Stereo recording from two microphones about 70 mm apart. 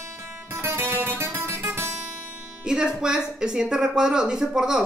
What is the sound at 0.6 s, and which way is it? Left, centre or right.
Guitar, right.